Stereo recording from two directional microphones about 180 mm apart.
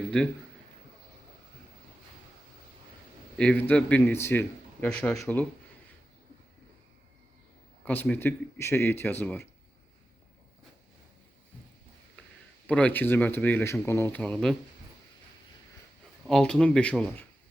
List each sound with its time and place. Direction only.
0.1 s speech: 5° left (ahead or behind)
3.3 s a man's voice: 5° left (ahead or behind)
7.9 s a man's voice: 10° left (ahead or behind)
12.6 s a man's voice: 10° left (ahead or behind)
16.2 s speech: 5° left (ahead or behind)